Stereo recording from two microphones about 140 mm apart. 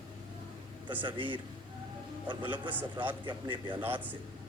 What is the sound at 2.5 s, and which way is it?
Speech, 15° right (ahead or behind).